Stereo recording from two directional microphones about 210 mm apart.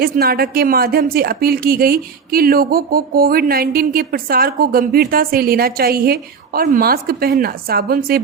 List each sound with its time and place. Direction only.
0.0 s a woman's voice: 45° right (ahead or behind)